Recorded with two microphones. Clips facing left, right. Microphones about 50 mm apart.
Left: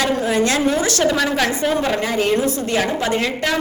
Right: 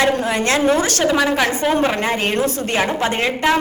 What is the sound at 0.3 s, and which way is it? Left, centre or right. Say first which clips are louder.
Speech: even; right.